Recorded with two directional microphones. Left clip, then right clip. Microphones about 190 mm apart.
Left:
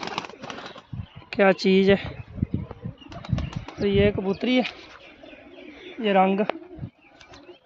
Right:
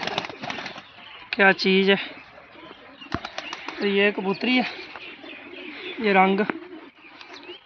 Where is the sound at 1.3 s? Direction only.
75° left (ahead or behind).